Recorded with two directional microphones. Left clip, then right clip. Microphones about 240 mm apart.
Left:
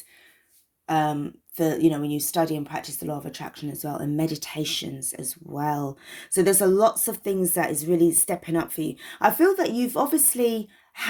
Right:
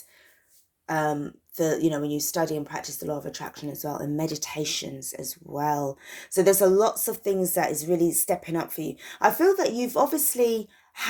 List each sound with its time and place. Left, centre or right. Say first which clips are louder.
0.9 s speech: left 2 dB; left
5.5 s speech: right 1 dB; left
6.2 s speech: right 1 dB; left